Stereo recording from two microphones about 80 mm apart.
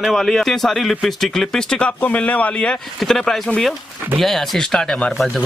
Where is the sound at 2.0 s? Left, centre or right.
Centre.